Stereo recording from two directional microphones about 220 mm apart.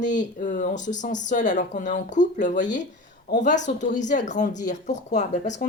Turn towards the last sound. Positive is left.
turn(degrees=30)  # may be behind; listen again after turning